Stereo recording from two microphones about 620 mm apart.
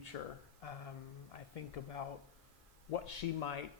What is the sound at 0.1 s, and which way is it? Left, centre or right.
Speech, left.